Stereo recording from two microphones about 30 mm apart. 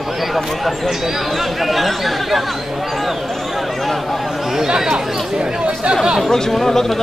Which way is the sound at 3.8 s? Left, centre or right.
Centre.